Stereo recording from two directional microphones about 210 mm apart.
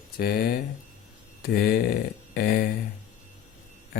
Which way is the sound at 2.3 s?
45° left (ahead or behind).